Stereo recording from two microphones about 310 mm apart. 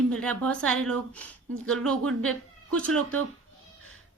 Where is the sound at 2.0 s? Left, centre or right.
Right.